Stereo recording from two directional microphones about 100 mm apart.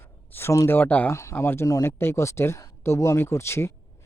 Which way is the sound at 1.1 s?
25° left (ahead or behind).